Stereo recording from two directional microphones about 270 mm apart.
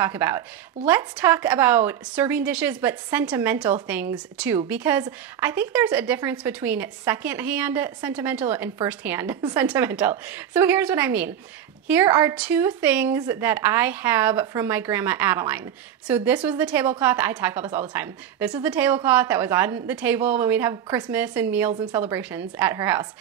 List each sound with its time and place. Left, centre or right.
0.0 s a woman's voice: centre